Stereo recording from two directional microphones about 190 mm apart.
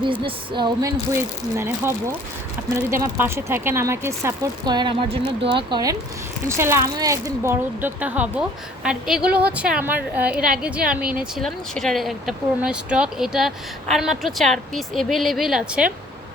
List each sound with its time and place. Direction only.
0.0 s speech: 25° right (ahead or behind); by 15.9 s 5° right (ahead or behind)